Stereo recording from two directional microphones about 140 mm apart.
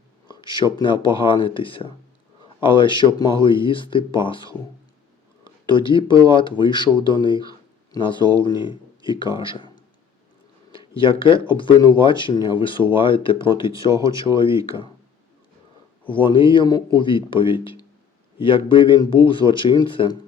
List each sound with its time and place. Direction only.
0.3 s speech: 35° left (ahead or behind)
5.6 s speech: 35° left (ahead or behind)
9.4 s a sound: 35° left (ahead or behind)
10.7 s speech: 40° left (ahead or behind)
13.9 s speech: 25° right (ahead or behind)
14.3 s speech: 35° left (ahead or behind)
16.0 s speech: 40° left (ahead or behind)